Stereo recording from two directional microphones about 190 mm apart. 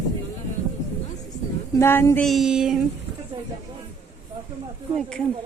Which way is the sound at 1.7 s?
10° left (ahead or behind).